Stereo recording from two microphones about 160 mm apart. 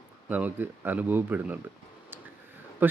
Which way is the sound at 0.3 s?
10° right (ahead or behind).